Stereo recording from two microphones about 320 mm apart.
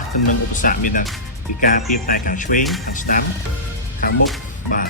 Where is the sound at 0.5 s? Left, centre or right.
Left.